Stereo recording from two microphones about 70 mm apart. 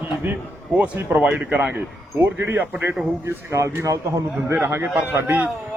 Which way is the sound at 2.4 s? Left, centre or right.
Right.